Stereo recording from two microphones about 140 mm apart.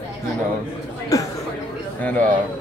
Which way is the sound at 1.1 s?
25° left (ahead or behind).